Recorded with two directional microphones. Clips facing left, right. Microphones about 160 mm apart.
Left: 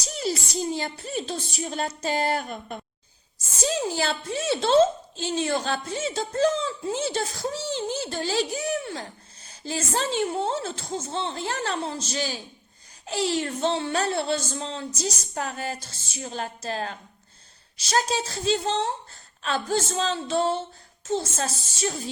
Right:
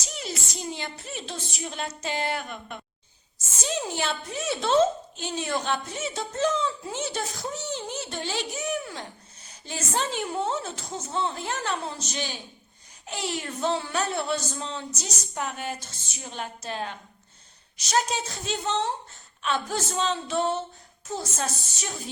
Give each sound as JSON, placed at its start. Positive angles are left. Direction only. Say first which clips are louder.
{"t": 0.0, "sound": "a woman's voice", "louder": "left 7 dB", "side_deg": 35}